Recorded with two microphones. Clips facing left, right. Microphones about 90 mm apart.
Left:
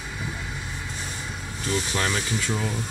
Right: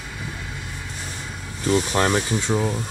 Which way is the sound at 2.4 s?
25° right (ahead or behind).